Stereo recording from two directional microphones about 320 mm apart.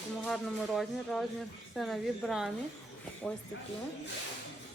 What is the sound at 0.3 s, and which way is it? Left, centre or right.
Speech, centre.